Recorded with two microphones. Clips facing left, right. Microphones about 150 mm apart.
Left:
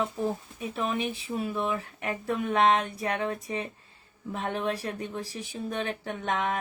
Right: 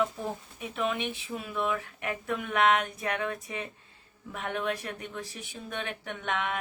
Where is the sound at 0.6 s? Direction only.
35° left (ahead or behind).